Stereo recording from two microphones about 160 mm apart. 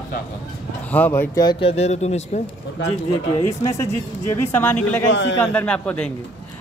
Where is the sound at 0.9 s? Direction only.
10° left (ahead or behind); by 2.4 s 45° left (ahead or behind).